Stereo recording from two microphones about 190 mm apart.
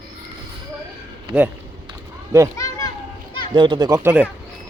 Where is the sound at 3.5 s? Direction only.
25° right (ahead or behind).